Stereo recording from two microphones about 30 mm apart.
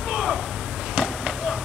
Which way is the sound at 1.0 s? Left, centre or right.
Right.